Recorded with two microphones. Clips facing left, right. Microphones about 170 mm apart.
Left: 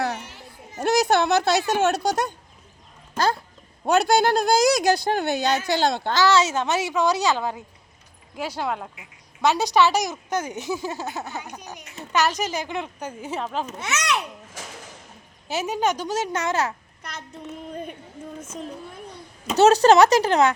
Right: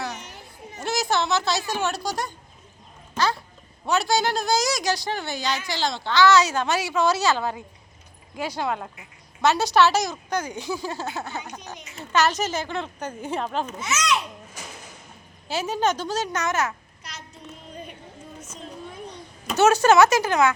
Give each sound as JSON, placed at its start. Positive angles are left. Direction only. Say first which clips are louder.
{"t": 0.2, "sound": "a sound", "louder": "left 1 dB", "side_deg": -15}
{"t": 0.8, "sound": "speech", "louder": "left 5 dB", "side_deg": 55}
{"t": 3.2, "sound": "a sound", "louder": "left 2 dB", "side_deg": 50}
{"t": 3.8, "sound": "speech", "louder": "left 4 dB", "side_deg": 55}
{"t": 6.2, "sound": "a woman's voice", "louder": "right 1 dB", "side_deg": 25}
{"t": 13.7, "sound": "speech", "louder": "right 2 dB", "side_deg": 65}
{"t": 15.4, "sound": "a woman's voice", "louder": "even", "side_deg": 20}
{"t": 17.0, "sound": "child singing", "louder": "left 4 dB", "side_deg": 55}
{"t": 17.7, "sound": "a sound", "louder": "left 5 dB", "side_deg": 55}
{"t": 19.5, "sound": "speech", "louder": "left 2 dB", "side_deg": 35}